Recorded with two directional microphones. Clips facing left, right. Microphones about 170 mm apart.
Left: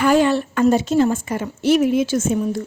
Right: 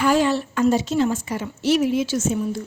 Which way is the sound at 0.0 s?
55° left (ahead or behind).